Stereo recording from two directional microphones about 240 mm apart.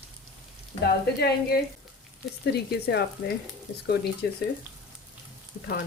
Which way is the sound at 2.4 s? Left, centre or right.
Left.